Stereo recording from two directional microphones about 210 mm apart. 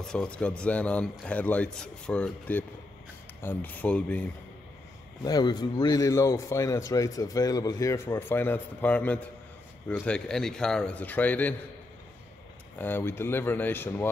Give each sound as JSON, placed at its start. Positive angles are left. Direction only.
{"t": 0.0, "sound": "a man's voice", "side_deg": 5}
{"t": 5.2, "sound": "a man's voice", "side_deg": 20}
{"t": 12.7, "sound": "a man's voice", "side_deg": 10}